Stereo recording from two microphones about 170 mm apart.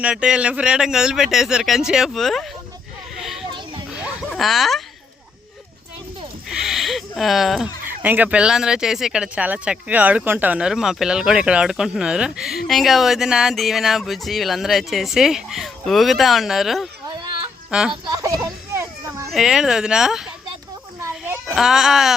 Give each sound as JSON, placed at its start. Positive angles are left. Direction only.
{"t": 0.0, "sound": "speech", "side_deg": -5}
{"t": 3.2, "sound": "vehicle", "side_deg": 0}
{"t": 4.3, "sound": "speech", "side_deg": 0}
{"t": 6.5, "sound": "a sound", "side_deg": 0}
{"t": 7.9, "sound": "speech", "side_deg": -10}
{"t": 18.0, "sound": "a sound", "side_deg": -20}
{"t": 19.3, "sound": "speech", "side_deg": -5}
{"t": 21.0, "sound": "a sound", "side_deg": -15}
{"t": 21.5, "sound": "speech", "side_deg": 0}